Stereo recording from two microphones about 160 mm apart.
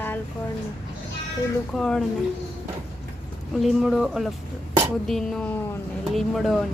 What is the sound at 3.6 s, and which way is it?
Speech, centre (ahead or behind).